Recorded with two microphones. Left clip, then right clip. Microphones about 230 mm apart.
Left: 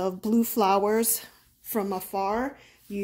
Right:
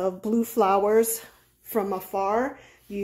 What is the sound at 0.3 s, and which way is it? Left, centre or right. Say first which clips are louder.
A woman's voice: right 1 dB; left.